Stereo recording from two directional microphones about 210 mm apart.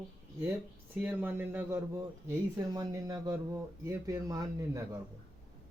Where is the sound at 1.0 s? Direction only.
5° right (ahead or behind).